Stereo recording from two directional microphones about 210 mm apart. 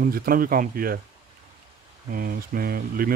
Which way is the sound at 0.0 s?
45° right (ahead or behind).